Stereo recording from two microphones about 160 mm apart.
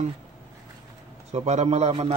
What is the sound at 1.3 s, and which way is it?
Speech, 45° right (ahead or behind).